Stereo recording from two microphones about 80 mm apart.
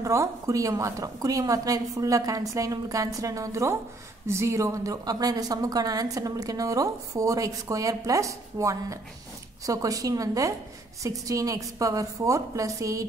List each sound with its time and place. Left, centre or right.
0.0 s a woman's voice: right